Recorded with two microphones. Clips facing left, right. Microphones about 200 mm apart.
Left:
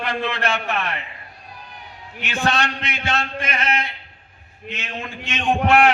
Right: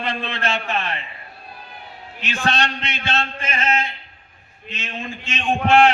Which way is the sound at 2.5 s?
30° right (ahead or behind).